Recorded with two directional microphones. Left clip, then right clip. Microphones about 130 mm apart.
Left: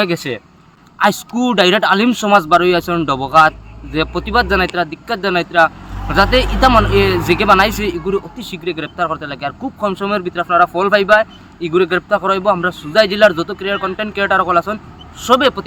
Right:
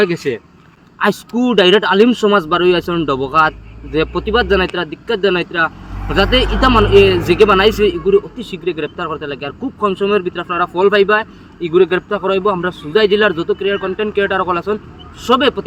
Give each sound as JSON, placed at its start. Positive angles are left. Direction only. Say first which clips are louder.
{"t": 0.0, "sound": "speech", "louder": "right 2 dB", "side_deg": 35}